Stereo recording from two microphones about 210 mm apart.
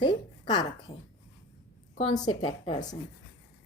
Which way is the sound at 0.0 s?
20° left (ahead or behind).